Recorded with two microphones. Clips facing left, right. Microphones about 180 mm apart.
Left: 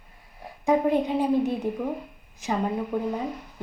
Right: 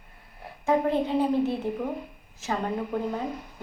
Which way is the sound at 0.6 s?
15° left (ahead or behind).